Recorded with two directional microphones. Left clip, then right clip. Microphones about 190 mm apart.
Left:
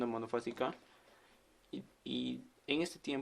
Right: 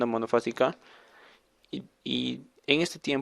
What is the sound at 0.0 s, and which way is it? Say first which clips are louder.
A man's voice: right 12 dB; 45° right (ahead or behind).